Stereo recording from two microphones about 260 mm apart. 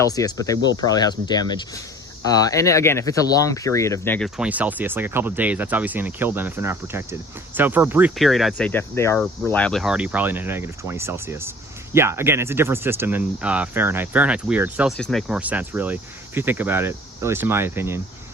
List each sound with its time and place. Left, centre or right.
0.0 s speech: centre
4.4 s speech: centre